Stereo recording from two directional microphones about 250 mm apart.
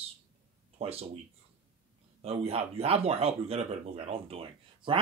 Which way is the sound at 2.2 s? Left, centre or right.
Right.